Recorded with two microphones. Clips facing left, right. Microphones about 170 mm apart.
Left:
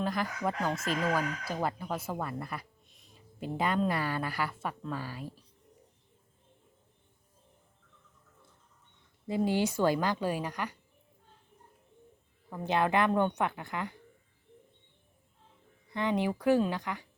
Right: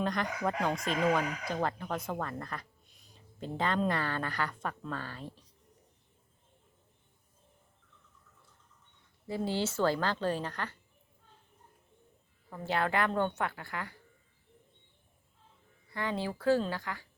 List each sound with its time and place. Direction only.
0.0 s speech: 5° left (ahead or behind)
9.2 s speech: 15° left (ahead or behind)
12.5 s a woman's voice: 20° left (ahead or behind)
15.9 s a woman's voice: 20° left (ahead or behind)